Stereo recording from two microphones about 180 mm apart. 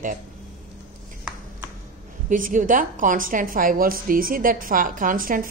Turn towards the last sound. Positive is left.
turn(degrees=-50)  # may be behind; listen again after turning